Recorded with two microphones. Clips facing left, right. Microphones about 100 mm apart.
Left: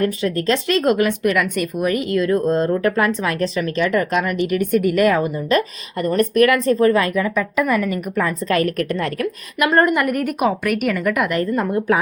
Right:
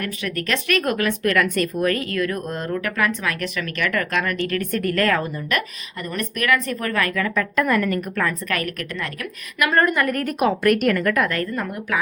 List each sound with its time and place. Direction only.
0.0 s a woman's voice: 30° left (ahead or behind)
1.3 s a woman's voice: 10° left (ahead or behind)
6.1 s a woman's voice: 40° left (ahead or behind)
7.3 s a woman's voice: 10° left (ahead or behind)
8.4 s a woman's voice: 30° left (ahead or behind)